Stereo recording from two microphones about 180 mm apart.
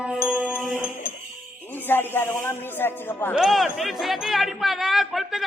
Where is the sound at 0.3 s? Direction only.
5° right (ahead or behind).